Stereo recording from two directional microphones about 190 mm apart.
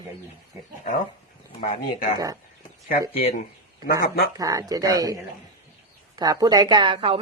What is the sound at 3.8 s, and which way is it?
Speech, 55° left (ahead or behind).